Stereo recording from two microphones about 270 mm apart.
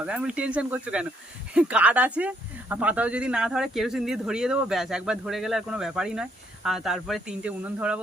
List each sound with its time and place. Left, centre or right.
0.0 s speech: centre